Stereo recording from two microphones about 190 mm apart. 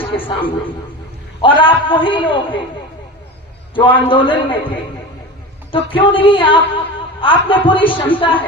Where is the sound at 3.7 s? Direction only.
25° left (ahead or behind).